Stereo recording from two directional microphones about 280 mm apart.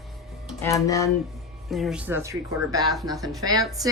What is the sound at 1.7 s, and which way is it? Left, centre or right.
Speech, centre.